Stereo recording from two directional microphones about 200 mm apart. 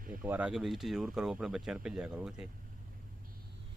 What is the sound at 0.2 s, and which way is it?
Speech, 5° right (ahead or behind).